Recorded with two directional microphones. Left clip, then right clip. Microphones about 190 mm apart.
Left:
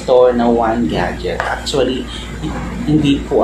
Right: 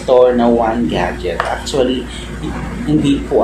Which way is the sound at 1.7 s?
15° left (ahead or behind).